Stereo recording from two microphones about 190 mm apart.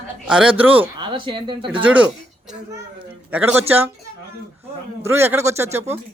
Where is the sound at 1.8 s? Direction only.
5° right (ahead or behind).